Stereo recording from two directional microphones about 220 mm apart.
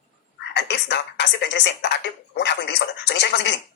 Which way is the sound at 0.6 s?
50° left (ahead or behind).